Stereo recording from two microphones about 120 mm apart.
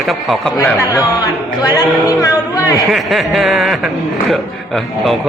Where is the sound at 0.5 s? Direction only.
30° left (ahead or behind).